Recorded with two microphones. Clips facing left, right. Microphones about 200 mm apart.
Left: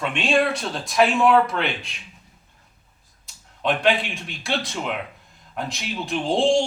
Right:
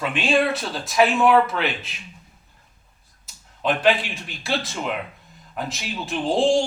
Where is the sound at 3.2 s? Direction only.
Centre (ahead or behind).